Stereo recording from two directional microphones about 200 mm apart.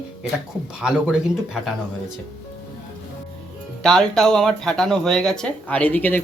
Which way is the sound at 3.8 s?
Centre (ahead or behind).